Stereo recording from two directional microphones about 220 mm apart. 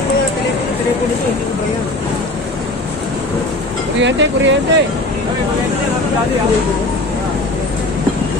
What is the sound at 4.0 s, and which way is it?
Speech, 55° right (ahead or behind).